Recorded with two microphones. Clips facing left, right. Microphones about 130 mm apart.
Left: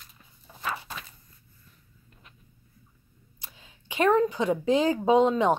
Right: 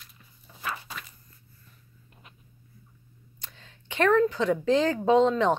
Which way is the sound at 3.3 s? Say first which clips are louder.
Even; 10° left (ahead or behind).